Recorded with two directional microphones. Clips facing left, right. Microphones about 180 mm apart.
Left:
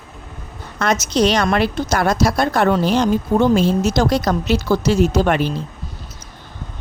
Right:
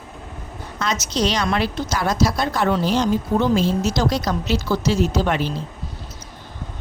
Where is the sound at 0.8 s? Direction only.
55° left (ahead or behind).